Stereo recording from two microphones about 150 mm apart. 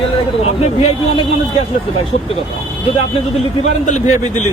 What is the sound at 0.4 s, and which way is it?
Speech, 45° left (ahead or behind).